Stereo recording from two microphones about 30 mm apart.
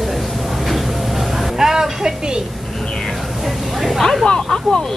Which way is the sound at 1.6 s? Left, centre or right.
Centre.